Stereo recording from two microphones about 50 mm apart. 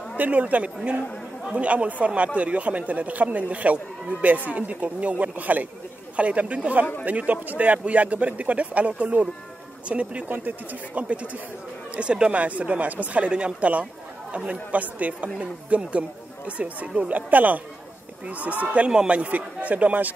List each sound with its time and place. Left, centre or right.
0.2 s speech: right
11.9 s speech: right
18.9 s speech: centre
19.1 s speech: right